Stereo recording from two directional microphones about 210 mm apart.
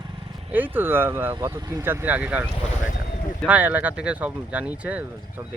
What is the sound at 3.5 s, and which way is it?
Speech, 5° right (ahead or behind).